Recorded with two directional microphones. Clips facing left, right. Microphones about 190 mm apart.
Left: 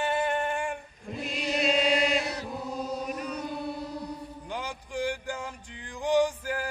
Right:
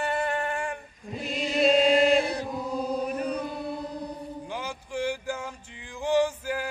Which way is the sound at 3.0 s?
35° right (ahead or behind).